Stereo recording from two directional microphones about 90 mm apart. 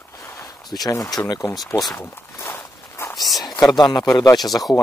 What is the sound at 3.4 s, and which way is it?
Speech, 50° left (ahead or behind).